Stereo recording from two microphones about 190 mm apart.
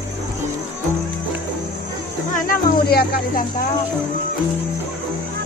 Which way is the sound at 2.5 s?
55° left (ahead or behind).